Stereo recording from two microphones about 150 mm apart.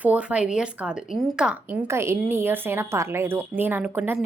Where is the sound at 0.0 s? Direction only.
10° right (ahead or behind).